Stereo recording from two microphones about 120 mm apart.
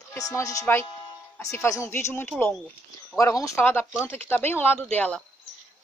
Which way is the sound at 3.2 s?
25° left (ahead or behind).